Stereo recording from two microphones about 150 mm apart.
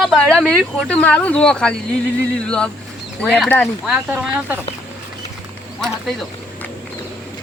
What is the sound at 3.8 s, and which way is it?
Speech, 5° right (ahead or behind).